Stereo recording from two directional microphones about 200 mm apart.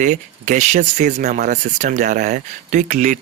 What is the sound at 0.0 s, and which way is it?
Speech, 40° right (ahead or behind).